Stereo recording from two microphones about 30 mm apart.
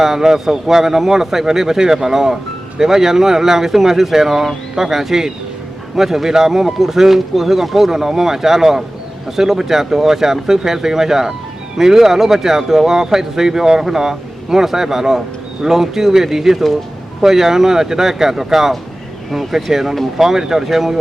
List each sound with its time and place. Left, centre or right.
0.0 s speech: centre